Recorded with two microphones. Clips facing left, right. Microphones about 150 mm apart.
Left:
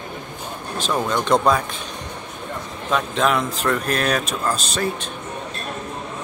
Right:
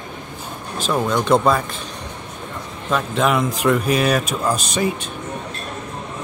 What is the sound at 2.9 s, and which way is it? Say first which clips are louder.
Speech: right 1 dB; 5° right (ahead or behind).